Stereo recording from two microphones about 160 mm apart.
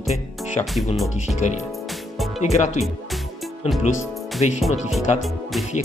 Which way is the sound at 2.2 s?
Centre (ahead or behind).